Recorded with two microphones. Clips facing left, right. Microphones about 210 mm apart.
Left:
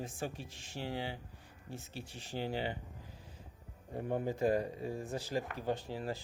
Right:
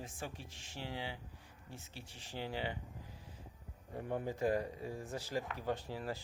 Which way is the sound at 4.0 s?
30° left (ahead or behind).